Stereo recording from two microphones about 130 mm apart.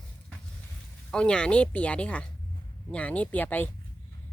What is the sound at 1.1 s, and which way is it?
Speech, 5° left (ahead or behind).